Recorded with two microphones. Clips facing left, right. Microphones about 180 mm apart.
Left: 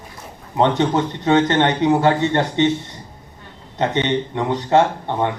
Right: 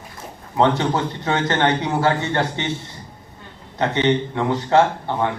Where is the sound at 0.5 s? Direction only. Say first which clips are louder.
Left 1 dB; 20° left (ahead or behind).